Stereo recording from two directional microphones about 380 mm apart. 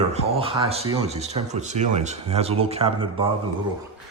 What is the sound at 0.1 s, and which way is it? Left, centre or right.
Speech, centre.